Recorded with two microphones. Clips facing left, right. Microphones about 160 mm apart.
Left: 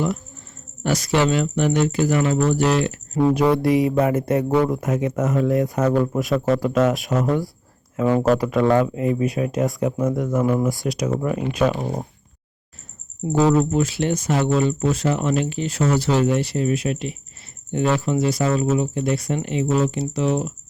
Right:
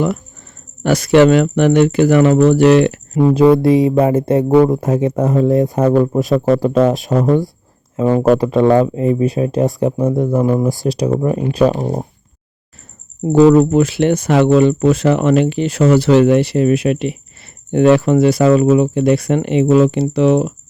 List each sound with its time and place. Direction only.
0.8 s speech: 65° right (ahead or behind)
3.2 s speech: 25° right (ahead or behind)
13.2 s speech: 70° right (ahead or behind)